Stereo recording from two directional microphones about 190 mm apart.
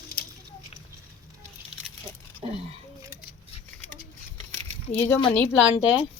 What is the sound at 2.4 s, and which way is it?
Speech, 35° right (ahead or behind).